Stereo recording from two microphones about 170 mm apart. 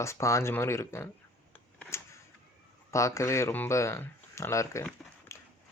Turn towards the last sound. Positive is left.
turn(degrees=15)  # may be behind; listen again after turning